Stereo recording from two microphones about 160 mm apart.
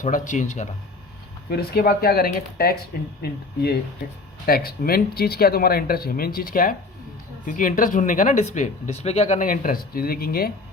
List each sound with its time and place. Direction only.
0.0 s speech: 55° left (ahead or behind)
1.5 s speech: 70° left (ahead or behind)